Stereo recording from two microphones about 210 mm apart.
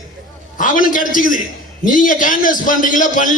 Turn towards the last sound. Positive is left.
turn(degrees=40)  # may be behind; listen again after turning